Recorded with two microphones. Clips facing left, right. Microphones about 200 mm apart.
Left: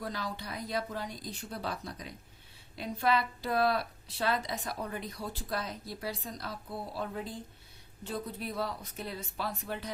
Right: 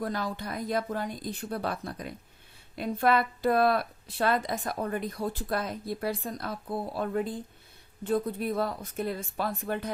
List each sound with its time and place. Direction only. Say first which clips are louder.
0.0 s speech: right 6 dB; 50° right (ahead or behind)